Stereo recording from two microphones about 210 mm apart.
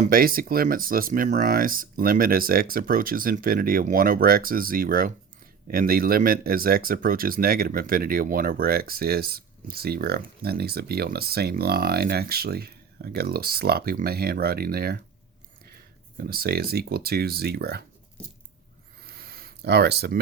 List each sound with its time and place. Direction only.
0.0 s speech: 45° right (ahead or behind)
16.1 s speech: 45° right (ahead or behind)
19.0 s a sound: 45° right (ahead or behind)